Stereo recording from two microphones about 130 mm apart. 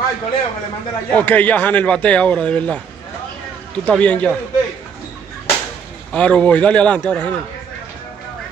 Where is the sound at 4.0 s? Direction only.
10° left (ahead or behind).